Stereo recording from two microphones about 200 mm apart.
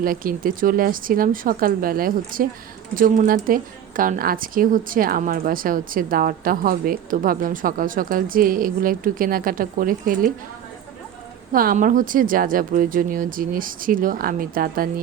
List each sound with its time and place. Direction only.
0.0 s a woman's voice: 45° right (ahead or behind)
11.5 s a woman's voice: 45° right (ahead or behind)